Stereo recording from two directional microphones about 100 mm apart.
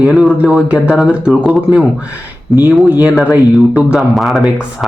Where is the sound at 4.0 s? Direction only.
Centre (ahead or behind).